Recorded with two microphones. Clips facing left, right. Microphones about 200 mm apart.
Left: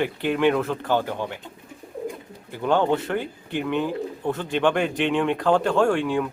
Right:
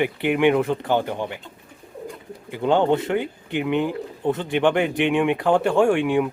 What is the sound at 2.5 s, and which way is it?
Speech, 20° right (ahead or behind).